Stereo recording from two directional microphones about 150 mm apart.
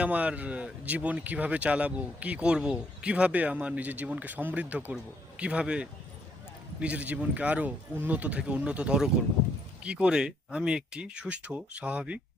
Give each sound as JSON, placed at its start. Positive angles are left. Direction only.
{"t": 0.0, "sound": "a man's voice", "side_deg": -10}